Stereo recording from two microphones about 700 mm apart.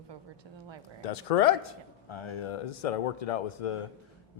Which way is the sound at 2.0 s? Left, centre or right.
Left.